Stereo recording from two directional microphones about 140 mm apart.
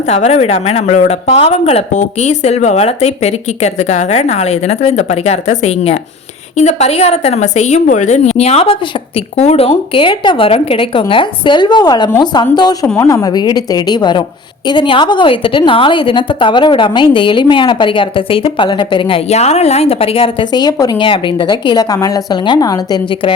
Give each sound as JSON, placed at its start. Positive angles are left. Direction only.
{"t": 0.1, "sound": "a woman's voice", "side_deg": 50}